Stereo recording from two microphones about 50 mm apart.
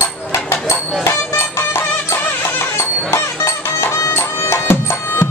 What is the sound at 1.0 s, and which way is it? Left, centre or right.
Music, left.